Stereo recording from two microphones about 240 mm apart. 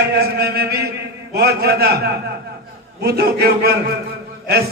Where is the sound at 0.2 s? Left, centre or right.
Right.